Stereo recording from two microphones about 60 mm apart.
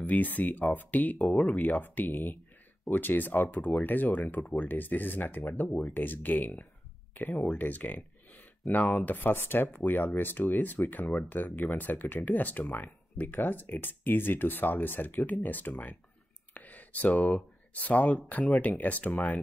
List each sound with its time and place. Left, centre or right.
0.0 s speech: left
16.5 s a sound: left
17.2 s speech: left